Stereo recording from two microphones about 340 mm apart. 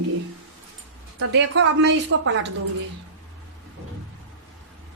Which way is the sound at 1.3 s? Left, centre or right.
Right.